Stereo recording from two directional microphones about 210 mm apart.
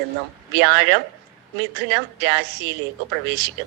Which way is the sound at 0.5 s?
55° right (ahead or behind).